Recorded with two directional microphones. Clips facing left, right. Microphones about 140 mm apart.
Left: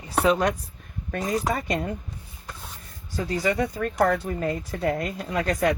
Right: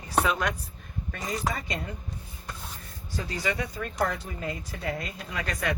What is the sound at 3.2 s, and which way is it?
Speech, 40° left (ahead or behind).